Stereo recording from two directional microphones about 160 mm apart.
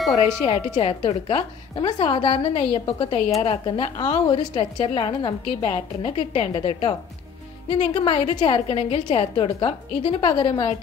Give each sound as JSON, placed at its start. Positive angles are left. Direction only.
{"t": 0.7, "sound": "a woman's voice", "side_deg": 35}